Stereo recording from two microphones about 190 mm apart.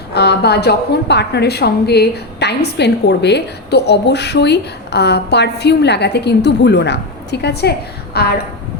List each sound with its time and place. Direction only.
0.1 s a woman's voice: 60° left (ahead or behind)